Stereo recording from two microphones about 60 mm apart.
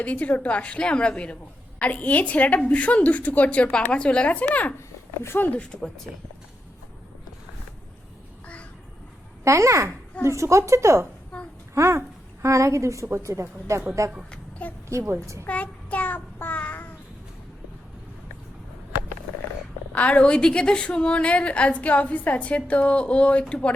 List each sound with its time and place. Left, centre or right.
0.0 s a woman's voice: left
5.2 s speech: left
5.7 s a woman's voice: centre
9.4 s a child's voice: right
11.3 s a sound: centre
11.7 s a woman's voice: right
14.8 s a woman's voice: right
15.4 s child singing: left
19.9 s a woman's voice: left